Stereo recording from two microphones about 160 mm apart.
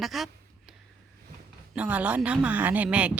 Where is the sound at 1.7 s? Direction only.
10° right (ahead or behind).